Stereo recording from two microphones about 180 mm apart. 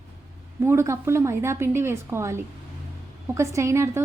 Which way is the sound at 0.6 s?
15° right (ahead or behind).